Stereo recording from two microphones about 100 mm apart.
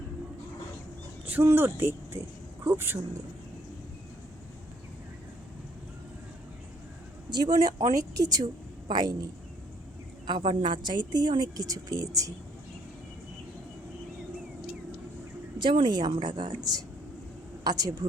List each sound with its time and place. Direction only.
1.5 s speech: 20° right (ahead or behind)
7.3 s a man's voice: 45° right (ahead or behind)
10.2 s a woman's voice: 60° right (ahead or behind); by 12.3 s 35° right (ahead or behind)
15.5 s a woman's voice: 55° right (ahead or behind)